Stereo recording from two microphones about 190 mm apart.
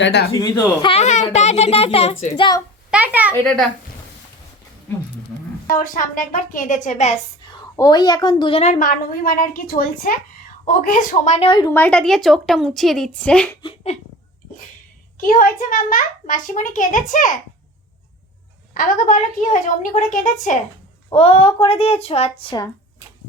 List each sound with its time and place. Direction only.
0.0 s speech: 65° left (ahead or behind)
0.3 s a woman's voice: 20° left (ahead or behind)
2.9 s a woman's voice: 10° right (ahead or behind)
5.6 s a child's voice: 45° left (ahead or behind)
7.8 s a woman's voice: 20° left (ahead or behind)
11.7 s a woman's voice: 10° left (ahead or behind)
13.6 s giggle: 25° left (ahead or behind)
15.2 s a child's voice: 45° left (ahead or behind)
18.7 s a child's voice: 45° left (ahead or behind)
21.1 s a woman's voice: 30° left (ahead or behind)